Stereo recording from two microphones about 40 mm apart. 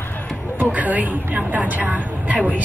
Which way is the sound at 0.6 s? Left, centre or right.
Right.